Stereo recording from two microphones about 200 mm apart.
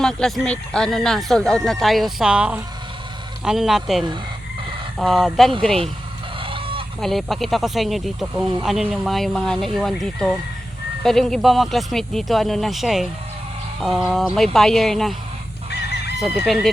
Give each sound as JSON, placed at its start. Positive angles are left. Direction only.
{"t": 0.0, "sound": "speech", "side_deg": 5}
{"t": 6.4, "sound": "fowl", "side_deg": -25}
{"t": 7.0, "sound": "speech", "side_deg": 0}
{"t": 16.1, "sound": "speech", "side_deg": 0}